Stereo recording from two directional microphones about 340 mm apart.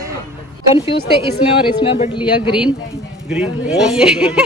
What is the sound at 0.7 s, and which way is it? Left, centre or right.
Speech, centre.